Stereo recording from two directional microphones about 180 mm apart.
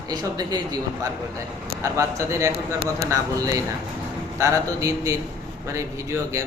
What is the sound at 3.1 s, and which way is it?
Speech, 20° right (ahead or behind).